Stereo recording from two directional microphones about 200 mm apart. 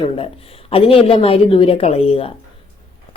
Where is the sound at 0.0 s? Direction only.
30° left (ahead or behind).